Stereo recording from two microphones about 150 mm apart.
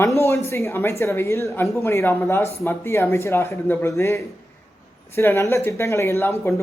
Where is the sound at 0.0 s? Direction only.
20° left (ahead or behind).